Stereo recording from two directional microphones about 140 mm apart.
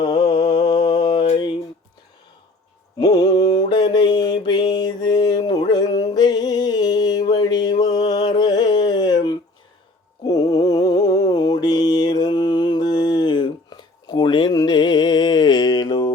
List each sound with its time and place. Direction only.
0.0 s a sound: 30° left (ahead or behind)
0.8 s mantra: 30° left (ahead or behind)
3.0 s mantra: 25° left (ahead or behind)